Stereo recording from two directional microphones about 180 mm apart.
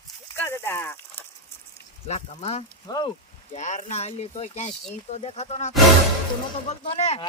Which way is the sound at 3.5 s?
40° left (ahead or behind).